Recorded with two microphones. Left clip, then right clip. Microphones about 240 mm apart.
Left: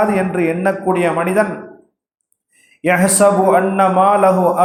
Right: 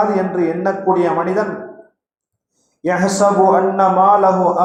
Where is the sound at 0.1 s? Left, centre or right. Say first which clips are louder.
Even; left.